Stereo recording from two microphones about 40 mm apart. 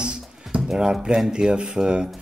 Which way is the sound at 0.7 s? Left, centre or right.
Centre.